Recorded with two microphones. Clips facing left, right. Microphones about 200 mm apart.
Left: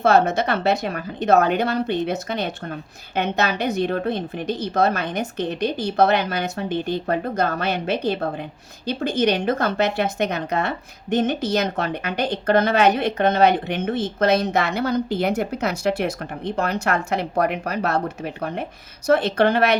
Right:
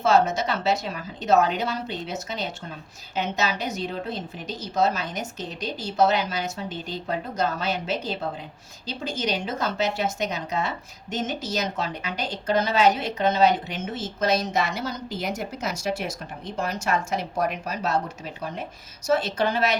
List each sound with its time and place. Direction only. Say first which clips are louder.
0.0 s speech: left 3 dB; 60° left (ahead or behind)